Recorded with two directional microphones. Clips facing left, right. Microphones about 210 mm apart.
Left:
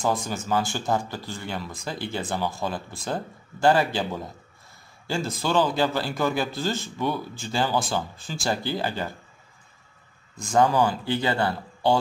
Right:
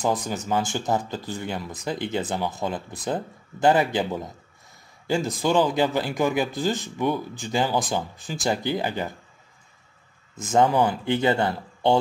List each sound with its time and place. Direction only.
0.0 s a man's voice: 20° right (ahead or behind)
10.3 s speech: 20° right (ahead or behind)